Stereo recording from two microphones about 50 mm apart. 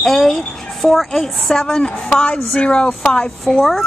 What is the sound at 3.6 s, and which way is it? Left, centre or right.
Speech, centre.